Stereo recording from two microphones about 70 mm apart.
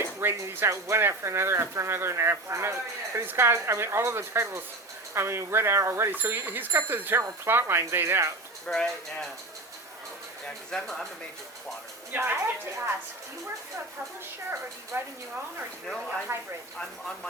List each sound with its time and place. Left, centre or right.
0.2 s speech: right
8.6 s speech: centre
10.4 s speech: centre
12.1 s speech: right
14.9 s speech: right
16.3 s speech: right
16.7 s speech: centre